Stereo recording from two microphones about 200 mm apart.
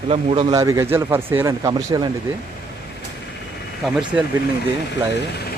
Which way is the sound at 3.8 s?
5° right (ahead or behind).